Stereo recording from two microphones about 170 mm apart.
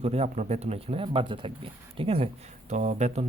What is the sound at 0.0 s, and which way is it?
Speech, 40° right (ahead or behind).